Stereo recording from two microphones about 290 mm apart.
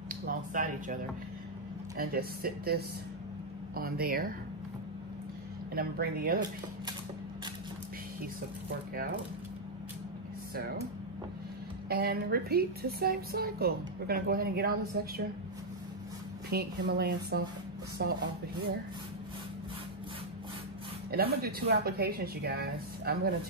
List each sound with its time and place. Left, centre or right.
0.3 s a woman's voice: right
5.8 s a woman's voice: right
11.9 s a woman's voice: right
16.4 s a woman's voice: right
21.1 s a woman's voice: right